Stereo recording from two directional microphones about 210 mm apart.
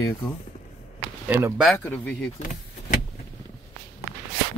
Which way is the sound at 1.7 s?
10° left (ahead or behind).